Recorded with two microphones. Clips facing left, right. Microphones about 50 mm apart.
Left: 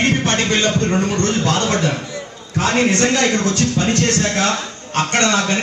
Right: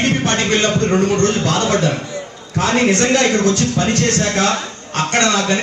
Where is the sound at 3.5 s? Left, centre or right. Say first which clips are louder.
Right 2 dB; left.